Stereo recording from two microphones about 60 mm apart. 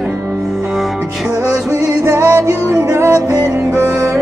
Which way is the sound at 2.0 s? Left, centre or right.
Right.